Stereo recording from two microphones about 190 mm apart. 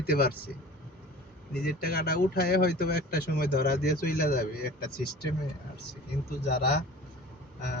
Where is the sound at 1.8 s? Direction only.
55° left (ahead or behind).